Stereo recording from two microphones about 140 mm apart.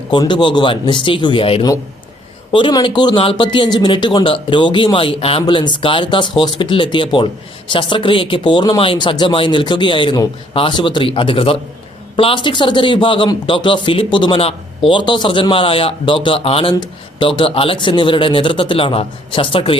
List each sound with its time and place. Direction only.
0.1 s a man's voice: 35° left (ahead or behind)